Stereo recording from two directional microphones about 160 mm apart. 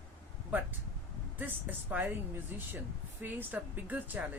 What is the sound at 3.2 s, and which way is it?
Speech, 10° right (ahead or behind).